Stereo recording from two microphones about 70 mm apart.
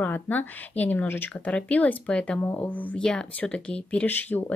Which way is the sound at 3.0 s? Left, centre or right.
Centre.